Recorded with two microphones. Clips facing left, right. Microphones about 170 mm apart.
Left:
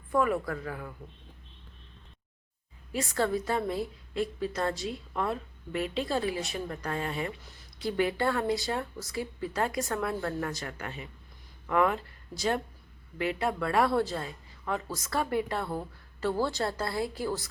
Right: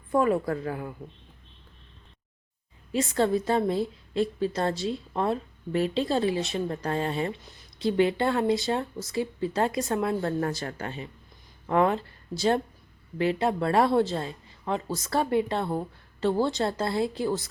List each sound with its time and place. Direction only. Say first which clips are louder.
0.1 s a woman's voice: right 4 dB; 30° right (ahead or behind)
2.9 s a woman's voice: right 5 dB; 25° right (ahead or behind)